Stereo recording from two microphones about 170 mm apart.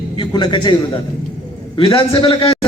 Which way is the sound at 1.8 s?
30° left (ahead or behind).